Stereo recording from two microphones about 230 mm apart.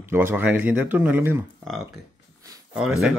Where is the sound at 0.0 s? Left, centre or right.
Centre.